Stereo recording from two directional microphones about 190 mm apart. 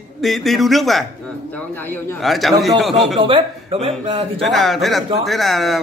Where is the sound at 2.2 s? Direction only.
Centre (ahead or behind).